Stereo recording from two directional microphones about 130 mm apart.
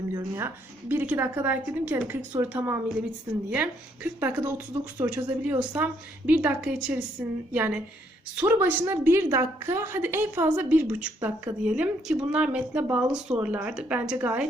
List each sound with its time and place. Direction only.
0.1 s speech: 20° right (ahead or behind)